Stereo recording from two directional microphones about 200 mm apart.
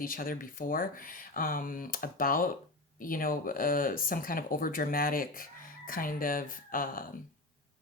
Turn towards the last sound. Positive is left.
turn(degrees=45)  # may be behind; listen again after turning